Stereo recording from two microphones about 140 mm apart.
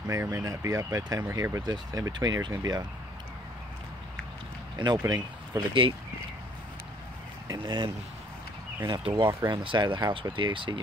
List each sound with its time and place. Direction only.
0.1 s speech: 20° right (ahead or behind)
4.7 s speech: 30° right (ahead or behind)
7.4 s speech: 30° right (ahead or behind)
9.3 s speech: 20° right (ahead or behind)
9.6 s speech: 35° right (ahead or behind)